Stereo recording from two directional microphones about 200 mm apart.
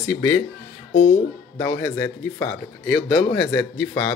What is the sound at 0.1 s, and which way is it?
Speech, 10° left (ahead or behind).